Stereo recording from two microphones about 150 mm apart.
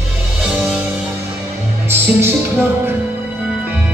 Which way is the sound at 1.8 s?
15° right (ahead or behind).